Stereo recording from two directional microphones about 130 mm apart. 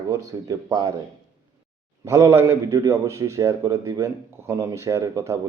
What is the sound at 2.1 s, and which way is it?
Speech, 25° right (ahead or behind).